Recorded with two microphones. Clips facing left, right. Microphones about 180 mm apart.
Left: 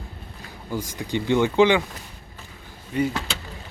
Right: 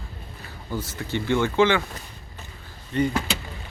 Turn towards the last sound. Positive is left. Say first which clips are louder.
# even
turn(degrees=5)  # may be behind; listen again after turning